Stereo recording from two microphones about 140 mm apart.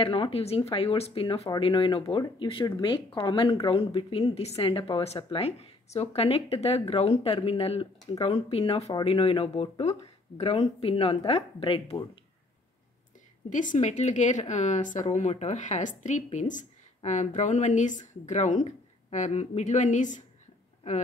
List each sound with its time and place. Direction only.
0.0 s a woman's voice: 40° left (ahead or behind)
1.5 s speech: 30° left (ahead or behind)
1.8 s a woman's voice: 40° left (ahead or behind)
13.5 s speech: 65° left (ahead or behind)